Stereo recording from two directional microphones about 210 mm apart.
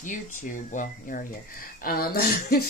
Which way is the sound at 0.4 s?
35° left (ahead or behind).